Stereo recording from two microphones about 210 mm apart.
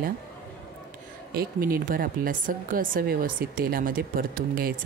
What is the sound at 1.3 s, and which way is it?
A woman's voice, 45° right (ahead or behind).